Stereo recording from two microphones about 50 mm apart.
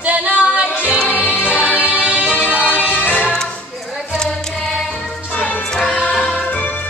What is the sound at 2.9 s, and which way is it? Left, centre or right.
Music, left.